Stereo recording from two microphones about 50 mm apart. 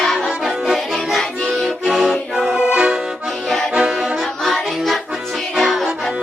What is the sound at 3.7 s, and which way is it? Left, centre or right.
Music, centre.